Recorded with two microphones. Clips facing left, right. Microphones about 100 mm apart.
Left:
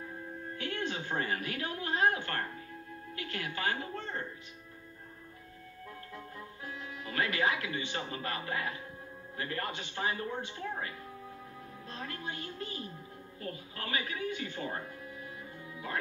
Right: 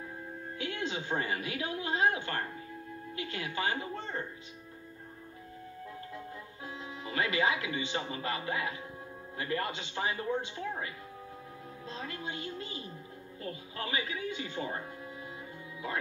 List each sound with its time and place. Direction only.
0.6 s a sound: 15° right (ahead or behind)
3.2 s speech: 20° right (ahead or behind)
6.6 s speech: 25° right (ahead or behind)
11.9 s speech: 20° right (ahead or behind)